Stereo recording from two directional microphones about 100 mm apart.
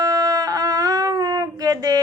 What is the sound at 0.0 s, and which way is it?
Speech, 40° right (ahead or behind).